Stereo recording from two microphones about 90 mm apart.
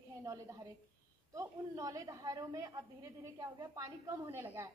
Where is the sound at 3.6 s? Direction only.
25° right (ahead or behind).